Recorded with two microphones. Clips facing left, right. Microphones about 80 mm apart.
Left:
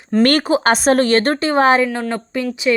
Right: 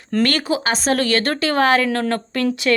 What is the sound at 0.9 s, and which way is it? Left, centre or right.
Speech, left.